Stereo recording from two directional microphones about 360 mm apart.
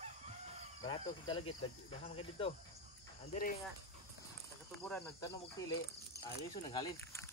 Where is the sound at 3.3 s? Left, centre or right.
Left.